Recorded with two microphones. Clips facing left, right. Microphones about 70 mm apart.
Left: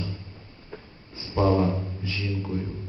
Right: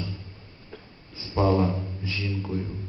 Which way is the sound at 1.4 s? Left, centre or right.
Centre.